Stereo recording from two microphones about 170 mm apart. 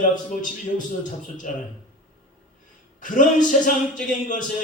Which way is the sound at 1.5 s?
55° left (ahead or behind).